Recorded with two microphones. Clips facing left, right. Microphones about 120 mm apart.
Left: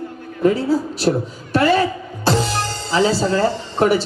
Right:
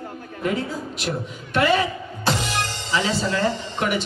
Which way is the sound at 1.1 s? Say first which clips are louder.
Left 10 dB; 35° left (ahead or behind).